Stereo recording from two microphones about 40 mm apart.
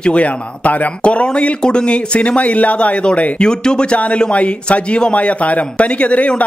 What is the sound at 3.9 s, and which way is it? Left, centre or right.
Speech, left.